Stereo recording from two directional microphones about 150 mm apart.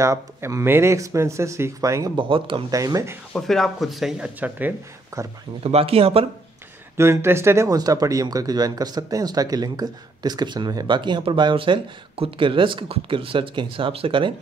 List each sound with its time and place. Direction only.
0.0 s speech: 20° right (ahead or behind)
2.1 s speech: 35° right (ahead or behind)
2.7 s speech: 20° right (ahead or behind)
3.3 s speech: centre (ahead or behind); by 5.3 s 15° right (ahead or behind)
5.6 s speech: 40° right (ahead or behind)
7.0 s speech: 15° right (ahead or behind); by 14.3 s 35° right (ahead or behind)